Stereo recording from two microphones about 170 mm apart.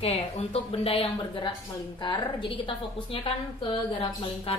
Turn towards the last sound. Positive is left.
turn(degrees=35)  # may be behind; listen again after turning